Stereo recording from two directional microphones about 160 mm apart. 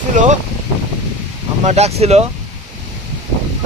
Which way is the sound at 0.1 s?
50° right (ahead or behind).